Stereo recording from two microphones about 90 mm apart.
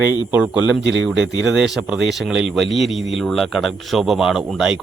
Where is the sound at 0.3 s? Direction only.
20° right (ahead or behind).